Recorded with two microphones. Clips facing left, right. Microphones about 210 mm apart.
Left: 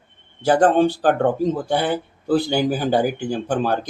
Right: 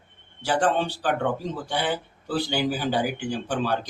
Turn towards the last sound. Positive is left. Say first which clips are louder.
# left 5 dB
turn(degrees=50)  # may be behind; listen again after turning